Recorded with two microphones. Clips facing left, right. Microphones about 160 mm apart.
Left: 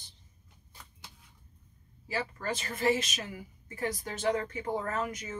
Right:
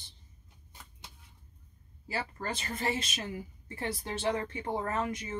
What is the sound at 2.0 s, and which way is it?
A woman's voice, 30° right (ahead or behind).